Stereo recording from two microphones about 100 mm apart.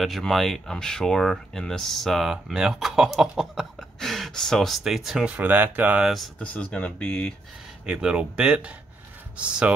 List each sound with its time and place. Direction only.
0.0 s speech: centre (ahead or behind)
5.3 s speech: 15° right (ahead or behind)
6.0 s speech: centre (ahead or behind)
6.4 s speech: 10° left (ahead or behind)
7.8 s speech: 10° right (ahead or behind)